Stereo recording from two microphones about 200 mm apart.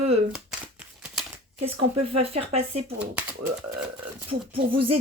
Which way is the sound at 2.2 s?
30° right (ahead or behind).